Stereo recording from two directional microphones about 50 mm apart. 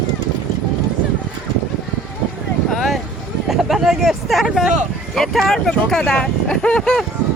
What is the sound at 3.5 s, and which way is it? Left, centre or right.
Vehicle, centre.